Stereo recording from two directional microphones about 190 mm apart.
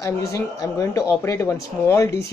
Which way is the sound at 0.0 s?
15° left (ahead or behind).